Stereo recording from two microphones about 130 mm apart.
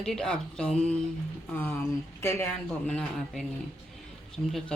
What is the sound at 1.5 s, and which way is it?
Speech, 15° left (ahead or behind).